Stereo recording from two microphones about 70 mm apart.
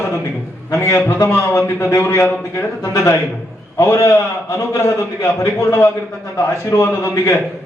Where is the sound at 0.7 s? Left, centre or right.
Left.